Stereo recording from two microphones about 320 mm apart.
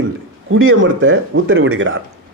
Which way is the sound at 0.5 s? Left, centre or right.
Right.